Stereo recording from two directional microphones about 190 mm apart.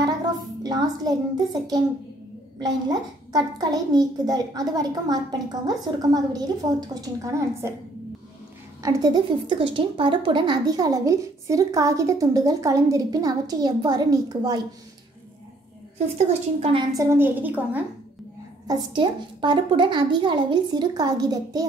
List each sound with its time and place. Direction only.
0.7 s speech: 20° right (ahead or behind)
8.8 s speech: 20° right (ahead or behind)
16.2 s speech: 35° right (ahead or behind)
16.9 s a woman's voice: 15° right (ahead or behind)
18.7 s speech: 25° right (ahead or behind)